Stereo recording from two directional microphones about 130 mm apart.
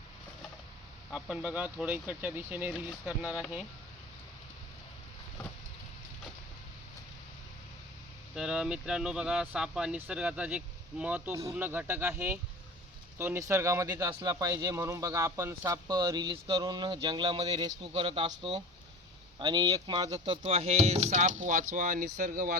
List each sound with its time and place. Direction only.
1.1 s speech: 10° right (ahead or behind)
8.4 s a man's voice: 5° right (ahead or behind); by 20.1 s 30° right (ahead or behind)
20.4 s speech: 50° right (ahead or behind); by 22.5 s 90° right